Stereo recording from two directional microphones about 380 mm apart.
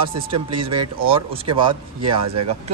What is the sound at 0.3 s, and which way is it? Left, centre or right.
Speech, centre.